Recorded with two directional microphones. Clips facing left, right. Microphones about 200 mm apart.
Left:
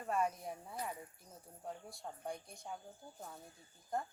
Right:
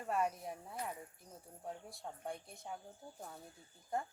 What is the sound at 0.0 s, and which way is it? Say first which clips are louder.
A woman's voice: even; 5° right (ahead or behind).